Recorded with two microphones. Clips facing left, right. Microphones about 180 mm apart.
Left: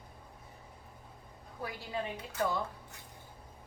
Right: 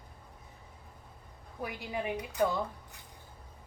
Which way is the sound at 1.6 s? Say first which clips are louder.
Right 2 dB; 15° right (ahead or behind).